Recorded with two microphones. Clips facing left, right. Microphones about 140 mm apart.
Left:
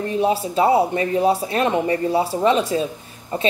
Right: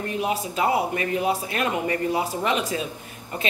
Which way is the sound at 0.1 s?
30° left (ahead or behind).